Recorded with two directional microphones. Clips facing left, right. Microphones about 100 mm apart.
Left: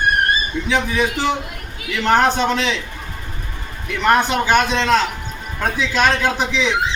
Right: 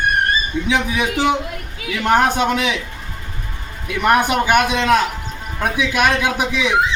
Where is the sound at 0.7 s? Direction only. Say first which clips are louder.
Left 1 dB; 15° right (ahead or behind).